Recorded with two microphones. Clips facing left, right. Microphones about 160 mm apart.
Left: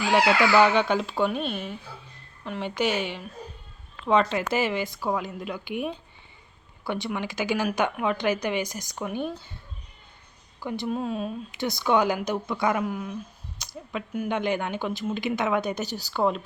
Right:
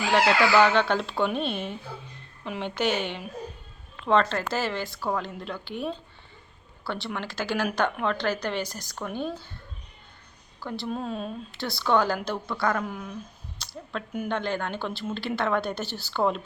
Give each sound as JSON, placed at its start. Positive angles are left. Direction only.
{"t": 0.1, "sound": "a woman's voice", "side_deg": 10}
{"t": 10.6, "sound": "speech", "side_deg": 15}
{"t": 10.8, "sound": "speech", "side_deg": 5}
{"t": 11.6, "sound": "a woman's voice", "side_deg": 15}
{"t": 12.8, "sound": "speech", "side_deg": 5}
{"t": 13.6, "sound": "a sound", "side_deg": 15}
{"t": 14.3, "sound": "a woman's voice", "side_deg": 15}